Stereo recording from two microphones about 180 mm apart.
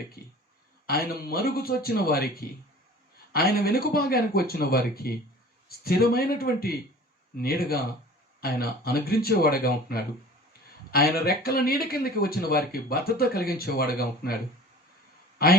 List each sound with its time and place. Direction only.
0.9 s speech: 60° left (ahead or behind)
15.4 s speech: 60° left (ahead or behind)